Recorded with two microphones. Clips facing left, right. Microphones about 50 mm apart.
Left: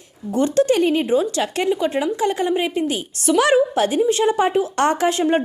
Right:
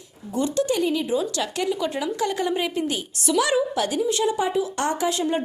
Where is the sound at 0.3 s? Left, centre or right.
Left.